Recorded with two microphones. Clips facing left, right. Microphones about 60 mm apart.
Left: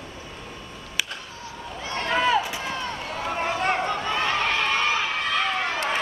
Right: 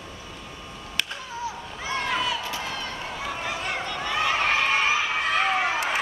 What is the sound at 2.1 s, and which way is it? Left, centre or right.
Run, left.